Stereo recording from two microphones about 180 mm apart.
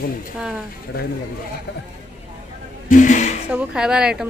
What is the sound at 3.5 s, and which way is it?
Speech, 5° right (ahead or behind).